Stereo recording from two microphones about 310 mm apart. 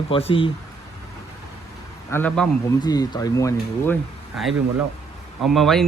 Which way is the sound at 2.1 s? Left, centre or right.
Centre.